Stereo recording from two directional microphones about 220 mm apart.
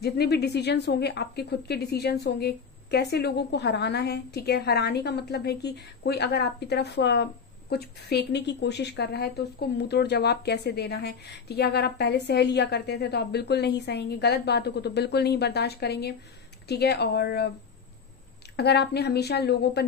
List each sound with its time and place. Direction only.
0.0 s a woman's voice: 45° left (ahead or behind)
18.6 s a woman's voice: 45° left (ahead or behind)